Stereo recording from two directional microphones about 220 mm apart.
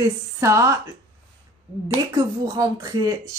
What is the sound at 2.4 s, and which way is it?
Speech, 15° right (ahead or behind).